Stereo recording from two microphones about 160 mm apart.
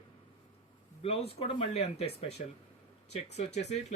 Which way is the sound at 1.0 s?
40° left (ahead or behind).